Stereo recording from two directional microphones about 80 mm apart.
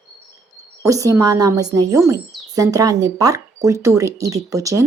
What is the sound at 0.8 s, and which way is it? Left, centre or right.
Speech, right.